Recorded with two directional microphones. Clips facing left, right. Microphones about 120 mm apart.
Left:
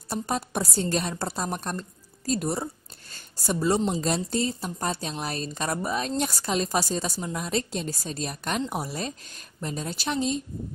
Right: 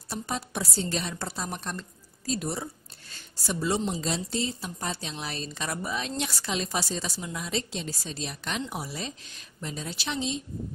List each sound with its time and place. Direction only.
0.1 s a woman's voice: 50° left (ahead or behind)